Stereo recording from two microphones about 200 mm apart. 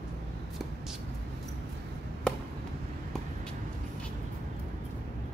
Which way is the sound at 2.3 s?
5° left (ahead or behind).